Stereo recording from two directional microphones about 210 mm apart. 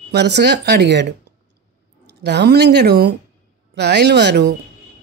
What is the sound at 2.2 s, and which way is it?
A woman's voice, 50° right (ahead or behind).